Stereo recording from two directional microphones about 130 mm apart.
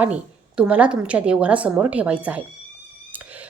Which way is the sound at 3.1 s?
10° right (ahead or behind).